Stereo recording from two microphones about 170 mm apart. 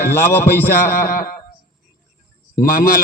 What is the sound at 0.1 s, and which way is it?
A man's voice, 10° left (ahead or behind).